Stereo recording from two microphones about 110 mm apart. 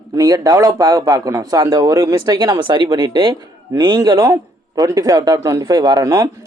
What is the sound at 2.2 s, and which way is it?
Speech, 40° right (ahead or behind).